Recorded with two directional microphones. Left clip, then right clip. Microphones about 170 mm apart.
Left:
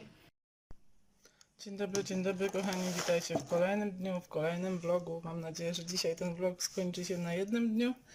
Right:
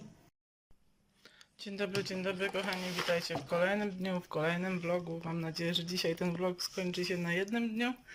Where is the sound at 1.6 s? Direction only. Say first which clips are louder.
Right 1 dB; 15° left (ahead or behind).